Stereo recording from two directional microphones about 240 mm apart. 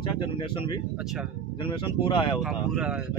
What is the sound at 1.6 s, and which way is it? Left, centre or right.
Speech, left.